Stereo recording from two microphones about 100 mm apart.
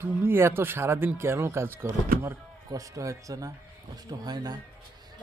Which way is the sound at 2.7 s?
35° right (ahead or behind).